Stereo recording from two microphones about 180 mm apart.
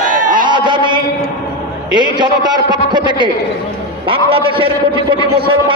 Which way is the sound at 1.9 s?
25° right (ahead or behind).